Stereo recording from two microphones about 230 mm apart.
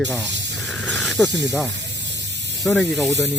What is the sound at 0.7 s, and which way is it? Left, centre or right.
Snake, centre.